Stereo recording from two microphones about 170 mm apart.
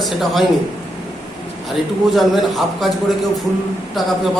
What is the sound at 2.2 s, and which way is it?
Speech, centre (ahead or behind).